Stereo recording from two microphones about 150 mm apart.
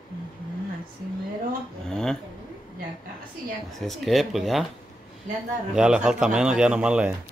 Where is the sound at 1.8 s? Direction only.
5° left (ahead or behind).